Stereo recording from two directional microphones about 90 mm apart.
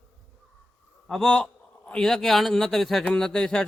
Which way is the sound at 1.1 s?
Centre (ahead or behind).